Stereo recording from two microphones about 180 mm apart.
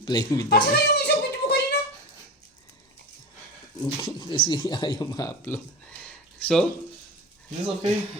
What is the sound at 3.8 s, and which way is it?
Speech, 25° left (ahead or behind).